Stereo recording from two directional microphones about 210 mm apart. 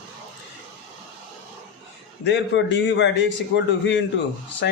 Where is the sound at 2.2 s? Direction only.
60° left (ahead or behind).